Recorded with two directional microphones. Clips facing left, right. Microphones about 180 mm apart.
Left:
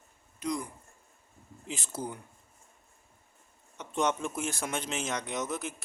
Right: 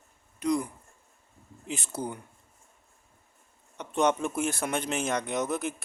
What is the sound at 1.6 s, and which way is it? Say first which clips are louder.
Speech: right 4 dB; 60° right (ahead or behind).